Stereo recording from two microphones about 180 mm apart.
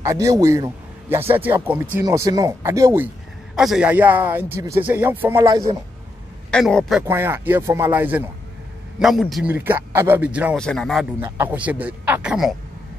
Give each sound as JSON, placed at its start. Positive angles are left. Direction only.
{"t": 0.0, "sound": "a man's voice", "side_deg": -15}
{"t": 3.5, "sound": "speech", "side_deg": -5}
{"t": 6.5, "sound": "a man's voice", "side_deg": 5}
{"t": 7.1, "sound": "speech", "side_deg": -10}
{"t": 10.6, "sound": "a man's voice", "side_deg": 5}
{"t": 11.1, "sound": "speech", "side_deg": -10}